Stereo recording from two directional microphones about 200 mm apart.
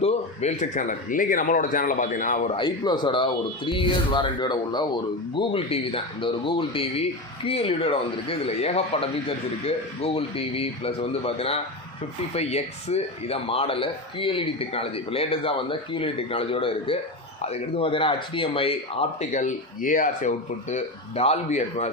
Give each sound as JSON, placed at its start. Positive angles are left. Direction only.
{"t": 0.0, "sound": "speech", "side_deg": 35}
{"t": 2.5, "sound": "speech", "side_deg": 25}